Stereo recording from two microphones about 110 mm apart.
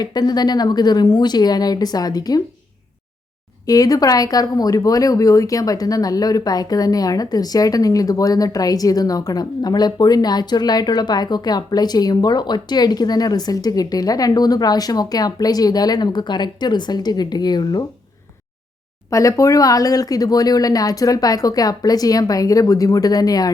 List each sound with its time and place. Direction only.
0.0 s speech: 35° left (ahead or behind)
3.7 s speech: 35° left (ahead or behind)
19.1 s speech: 30° left (ahead or behind)